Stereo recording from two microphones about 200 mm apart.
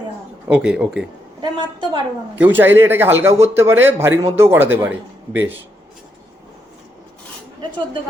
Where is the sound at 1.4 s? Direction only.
25° right (ahead or behind).